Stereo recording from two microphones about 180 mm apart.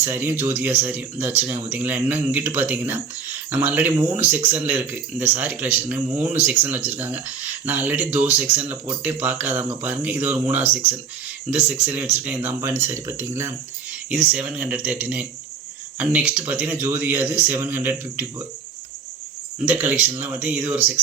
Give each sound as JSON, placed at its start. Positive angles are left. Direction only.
{"t": 0.0, "sound": "speech", "side_deg": -10}
{"t": 19.6, "sound": "speech", "side_deg": -10}